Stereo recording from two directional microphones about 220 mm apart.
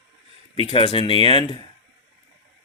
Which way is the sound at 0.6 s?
25° left (ahead or behind).